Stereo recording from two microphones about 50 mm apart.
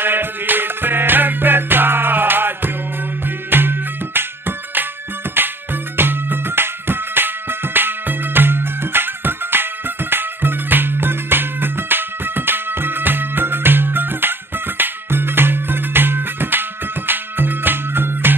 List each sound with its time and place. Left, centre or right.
0.0 s music: right